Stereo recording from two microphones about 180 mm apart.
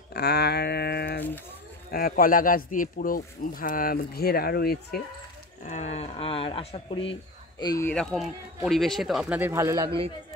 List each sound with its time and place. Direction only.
0.1 s a sound: 65° left (ahead or behind)
1.9 s speech: 55° left (ahead or behind)
5.6 s speech: 40° left (ahead or behind); by 7.9 s 20° left (ahead or behind)
7.9 s speech: 5° left (ahead or behind); by 9.8 s 15° right (ahead or behind)